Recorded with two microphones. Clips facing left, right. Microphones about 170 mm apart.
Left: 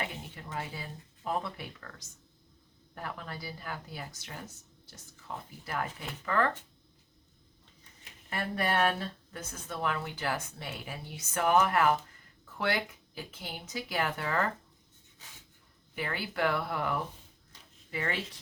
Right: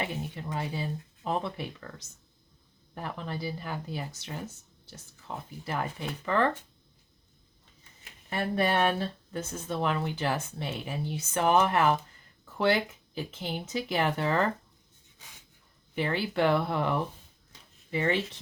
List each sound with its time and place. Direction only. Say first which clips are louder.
0.5 s speech: right 5 dB; 20° right (ahead or behind)
2.9 s speech: right 4 dB; 25° right (ahead or behind)
5.6 s speech: right 3 dB; 25° right (ahead or behind)
8.3 s speech: right 4 dB; 25° right (ahead or behind)
16.0 s speech: right 5 dB; 25° right (ahead or behind)